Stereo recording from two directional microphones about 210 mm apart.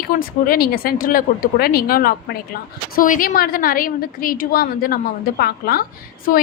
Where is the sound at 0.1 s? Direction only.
45° left (ahead or behind).